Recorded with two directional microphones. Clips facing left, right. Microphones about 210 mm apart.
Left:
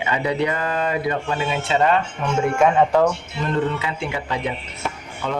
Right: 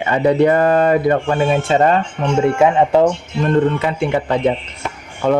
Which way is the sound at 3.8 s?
55° right (ahead or behind).